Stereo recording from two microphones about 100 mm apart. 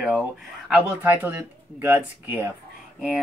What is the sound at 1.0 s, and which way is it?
Speech, 20° right (ahead or behind).